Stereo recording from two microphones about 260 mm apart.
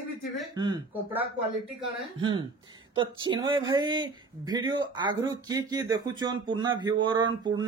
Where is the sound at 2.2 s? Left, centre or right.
Centre.